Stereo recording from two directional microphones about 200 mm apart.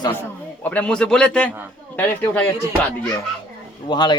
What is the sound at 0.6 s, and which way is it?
A man's voice, 5° left (ahead or behind).